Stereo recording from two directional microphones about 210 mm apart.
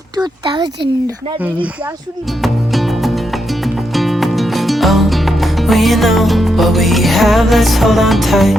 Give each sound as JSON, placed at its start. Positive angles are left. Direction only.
{"t": 0.2, "sound": "a child's voice", "side_deg": -20}
{"t": 2.4, "sound": "music", "side_deg": 0}